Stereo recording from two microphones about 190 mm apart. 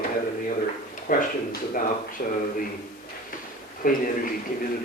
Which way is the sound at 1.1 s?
50° left (ahead or behind).